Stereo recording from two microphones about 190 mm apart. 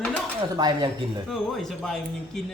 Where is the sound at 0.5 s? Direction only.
20° right (ahead or behind).